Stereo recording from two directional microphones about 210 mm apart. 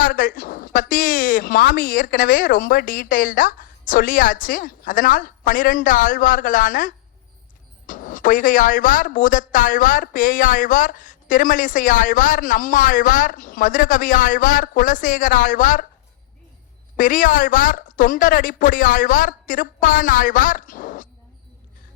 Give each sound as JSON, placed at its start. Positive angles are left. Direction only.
{"t": 0.0, "sound": "speech", "side_deg": 40}
{"t": 17.0, "sound": "speech", "side_deg": 40}